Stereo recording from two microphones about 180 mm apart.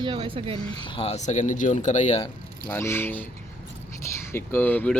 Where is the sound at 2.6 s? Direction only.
10° left (ahead or behind).